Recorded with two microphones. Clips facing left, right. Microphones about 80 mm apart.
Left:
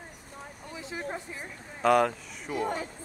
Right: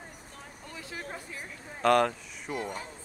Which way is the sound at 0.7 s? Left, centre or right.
Left.